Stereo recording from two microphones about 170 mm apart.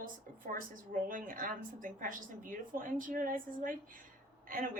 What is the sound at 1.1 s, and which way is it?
A woman's voice, 55° right (ahead or behind).